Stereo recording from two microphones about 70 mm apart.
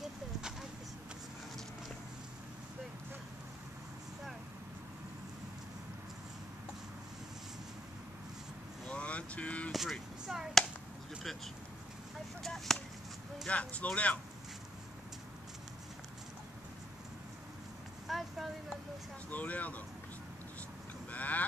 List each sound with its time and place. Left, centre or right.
0.4 s a sound: centre
8.8 s vehicle: centre
9.7 s speech: centre
12.4 s chop: centre
13.5 s speech: centre
18.0 s vehicle: centre
19.3 s vehicle: left
21.1 s vehicle: left